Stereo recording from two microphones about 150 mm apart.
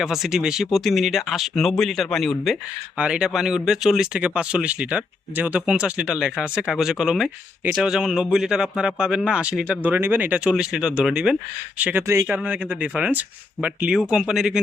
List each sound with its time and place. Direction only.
0.0 s speech: centre (ahead or behind); by 12.4 s 20° right (ahead or behind)
12.4 s speech: 5° right (ahead or behind)